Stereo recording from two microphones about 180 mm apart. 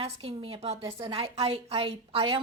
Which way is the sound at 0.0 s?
30° right (ahead or behind).